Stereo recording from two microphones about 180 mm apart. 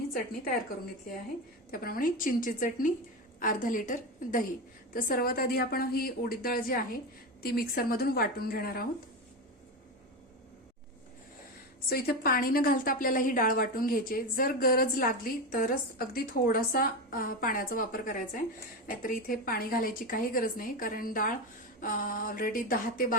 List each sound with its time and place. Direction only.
1.7 s a woman's voice: 55° left (ahead or behind)
11.9 s a woman's voice: 60° left (ahead or behind)